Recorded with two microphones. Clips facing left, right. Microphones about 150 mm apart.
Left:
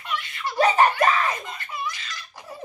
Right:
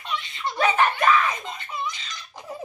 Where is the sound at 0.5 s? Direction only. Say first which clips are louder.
Left 3 dB; 40° left (ahead or behind).